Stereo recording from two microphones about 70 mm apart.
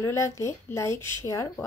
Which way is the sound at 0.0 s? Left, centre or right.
Left.